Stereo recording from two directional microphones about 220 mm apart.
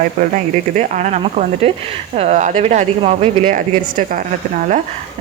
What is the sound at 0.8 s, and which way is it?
Speech, 35° right (ahead or behind).